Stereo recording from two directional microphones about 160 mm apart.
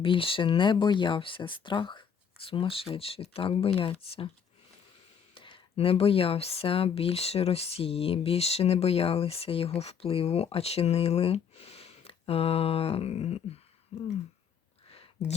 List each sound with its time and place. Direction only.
0.0 s speech: 35° left (ahead or behind)
5.3 s speech: 35° left (ahead or behind)
15.2 s speech: 90° left